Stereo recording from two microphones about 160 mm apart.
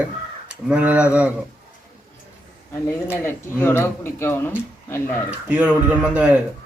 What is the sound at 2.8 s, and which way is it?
Speech, 15° left (ahead or behind).